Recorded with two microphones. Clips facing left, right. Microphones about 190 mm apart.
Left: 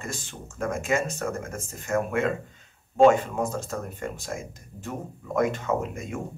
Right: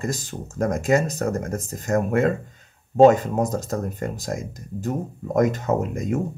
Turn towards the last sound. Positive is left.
turn(degrees=-40)  # may be behind; listen again after turning